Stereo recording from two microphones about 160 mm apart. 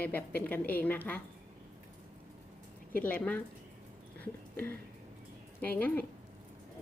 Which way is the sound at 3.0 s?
10° left (ahead or behind).